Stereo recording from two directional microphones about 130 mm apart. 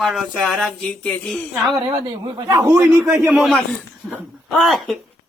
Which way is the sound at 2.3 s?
25° right (ahead or behind).